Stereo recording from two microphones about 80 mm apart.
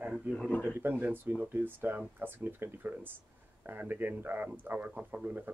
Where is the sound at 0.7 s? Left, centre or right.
Right.